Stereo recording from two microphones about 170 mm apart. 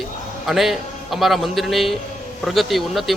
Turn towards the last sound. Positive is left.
turn(degrees=0)  # may be behind; listen again after turning